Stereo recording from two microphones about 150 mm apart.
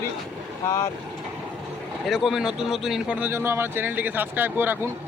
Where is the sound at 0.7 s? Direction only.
20° left (ahead or behind).